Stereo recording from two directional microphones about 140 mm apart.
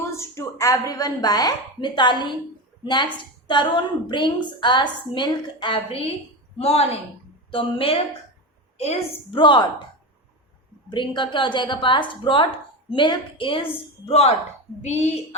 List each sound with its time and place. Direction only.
0.2 s a woman's voice: 20° left (ahead or behind); by 8.0 s 40° left (ahead or behind)
9.3 s a woman's voice: 35° left (ahead or behind)
10.8 s a woman's voice: 35° left (ahead or behind); by 15.4 s 50° left (ahead or behind)